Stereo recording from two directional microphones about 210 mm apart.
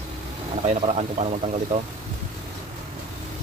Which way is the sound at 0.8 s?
30° right (ahead or behind).